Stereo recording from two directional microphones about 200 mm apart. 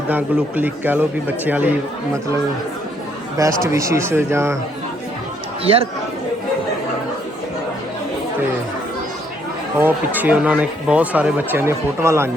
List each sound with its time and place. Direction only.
0.1 s speech: 10° right (ahead or behind)
3.3 s speech: 15° right (ahead or behind)
5.6 s speech: 30° right (ahead or behind)
9.7 s speech: 10° right (ahead or behind)